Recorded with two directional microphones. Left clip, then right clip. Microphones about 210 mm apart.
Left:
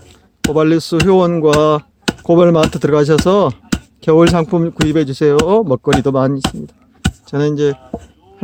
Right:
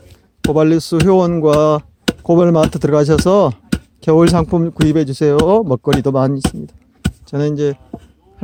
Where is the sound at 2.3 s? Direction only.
20° right (ahead or behind).